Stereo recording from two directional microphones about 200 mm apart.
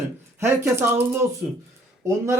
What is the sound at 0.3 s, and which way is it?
Speech, 15° right (ahead or behind).